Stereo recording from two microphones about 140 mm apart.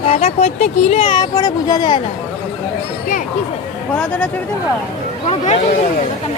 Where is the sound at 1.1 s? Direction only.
30° left (ahead or behind).